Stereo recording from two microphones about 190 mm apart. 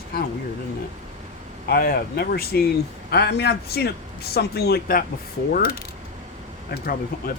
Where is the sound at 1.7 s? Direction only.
55° left (ahead or behind).